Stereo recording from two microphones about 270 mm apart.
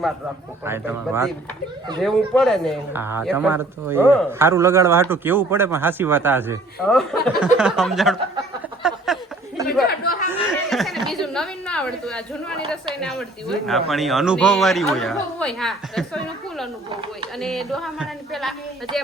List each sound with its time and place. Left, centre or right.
0.6 s speech: centre
9.8 s chatter: left
10.3 s a woman's voice: centre